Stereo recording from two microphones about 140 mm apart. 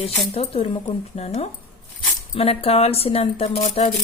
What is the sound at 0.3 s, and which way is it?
Speech, 40° left (ahead or behind).